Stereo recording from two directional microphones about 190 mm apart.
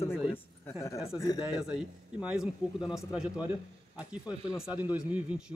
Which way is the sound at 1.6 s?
5° right (ahead or behind).